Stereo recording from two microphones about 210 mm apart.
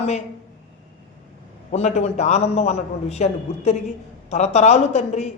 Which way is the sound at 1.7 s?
30° left (ahead or behind).